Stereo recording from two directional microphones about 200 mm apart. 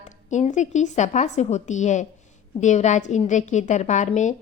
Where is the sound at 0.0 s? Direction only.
35° left (ahead or behind).